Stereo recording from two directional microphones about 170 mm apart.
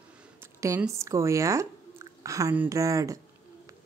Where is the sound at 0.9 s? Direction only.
15° right (ahead or behind).